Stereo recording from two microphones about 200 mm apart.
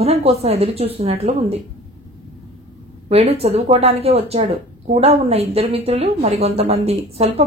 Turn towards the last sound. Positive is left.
turn(degrees=-30)  # may be behind; listen again after turning